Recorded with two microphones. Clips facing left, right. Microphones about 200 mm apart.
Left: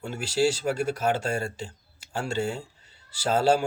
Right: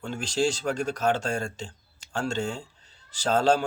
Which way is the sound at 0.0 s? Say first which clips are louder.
Left 2 dB; 10° left (ahead or behind).